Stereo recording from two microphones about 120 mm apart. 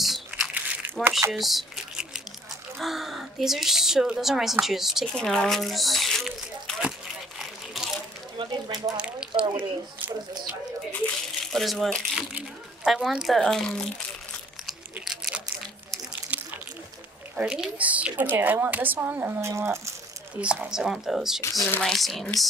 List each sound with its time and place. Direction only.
0.0 s crumpling: centre (ahead or behind)
2.8 s a woman's voice: centre (ahead or behind)
7.8 s a sound: centre (ahead or behind)
8.4 s speech: 40° right (ahead or behind)
8.9 s drip: 10° right (ahead or behind)
9.4 s a woman's voice: 15° right (ahead or behind)
11.5 s speech: centre (ahead or behind)
15.0 s a sound: 5° right (ahead or behind)
17.4 s a woman's voice: 10° right (ahead or behind)
20.3 s speech: 10° right (ahead or behind)